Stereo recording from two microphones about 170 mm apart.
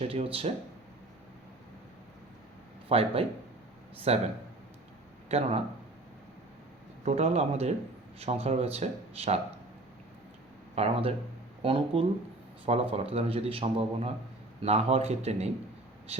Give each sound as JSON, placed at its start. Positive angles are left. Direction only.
{"t": 0.0, "sound": "speech", "side_deg": -35}
{"t": 2.9, "sound": "speech", "side_deg": -35}
{"t": 5.3, "sound": "speech", "side_deg": -35}
{"t": 7.0, "sound": "speech", "side_deg": -40}
{"t": 10.8, "sound": "speech", "side_deg": -35}